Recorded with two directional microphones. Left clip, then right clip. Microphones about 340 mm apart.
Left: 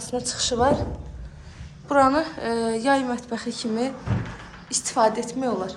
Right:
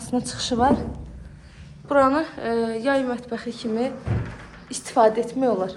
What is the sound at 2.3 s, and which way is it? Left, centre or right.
Speech, centre.